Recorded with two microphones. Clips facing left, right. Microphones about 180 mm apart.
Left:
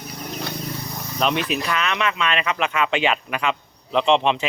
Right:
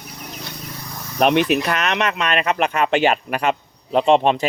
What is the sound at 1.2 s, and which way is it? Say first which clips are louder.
Speech: right 6 dB; 60° right (ahead or behind).